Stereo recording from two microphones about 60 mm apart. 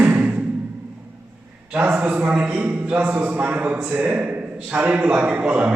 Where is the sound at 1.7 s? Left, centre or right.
Right.